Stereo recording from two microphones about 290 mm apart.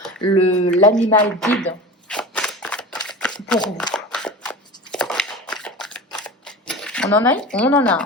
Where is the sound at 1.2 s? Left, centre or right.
Centre.